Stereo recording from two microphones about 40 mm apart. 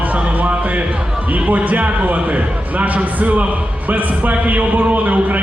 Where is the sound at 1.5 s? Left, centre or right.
Right.